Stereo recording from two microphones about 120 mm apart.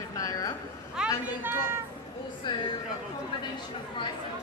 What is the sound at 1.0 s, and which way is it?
Speech, 5° right (ahead or behind).